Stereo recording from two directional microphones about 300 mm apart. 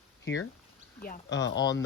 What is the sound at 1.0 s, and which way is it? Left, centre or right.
Speech, left.